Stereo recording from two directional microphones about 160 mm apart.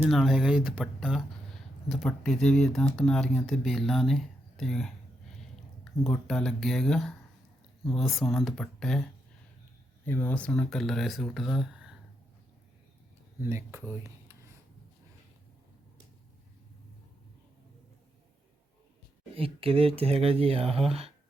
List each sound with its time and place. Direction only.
0.1 s speech: centre (ahead or behind)
10.1 s speech: 15° left (ahead or behind); by 11.9 s 5° right (ahead or behind)
13.4 s speech: 15° right (ahead or behind)
19.4 s speech: 35° right (ahead or behind)